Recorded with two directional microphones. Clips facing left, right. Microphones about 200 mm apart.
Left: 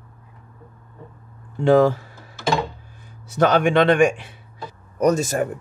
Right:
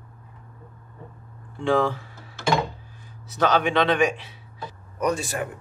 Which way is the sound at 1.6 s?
40° left (ahead or behind).